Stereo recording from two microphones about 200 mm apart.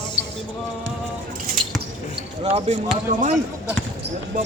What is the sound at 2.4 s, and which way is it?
Speech, 30° right (ahead or behind).